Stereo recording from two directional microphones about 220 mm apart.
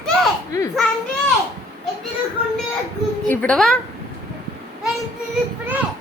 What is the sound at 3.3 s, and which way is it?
Speech, 5° left (ahead or behind).